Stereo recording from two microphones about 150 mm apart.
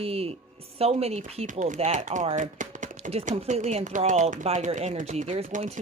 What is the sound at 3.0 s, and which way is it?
Speech, 45° right (ahead or behind).